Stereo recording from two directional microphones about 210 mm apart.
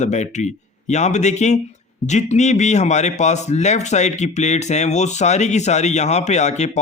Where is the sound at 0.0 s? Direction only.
35° left (ahead or behind).